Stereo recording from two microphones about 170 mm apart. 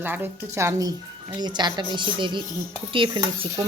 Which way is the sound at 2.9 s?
25° right (ahead or behind).